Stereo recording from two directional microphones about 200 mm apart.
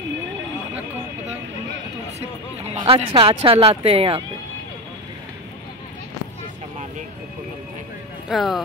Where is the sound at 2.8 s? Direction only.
25° right (ahead or behind).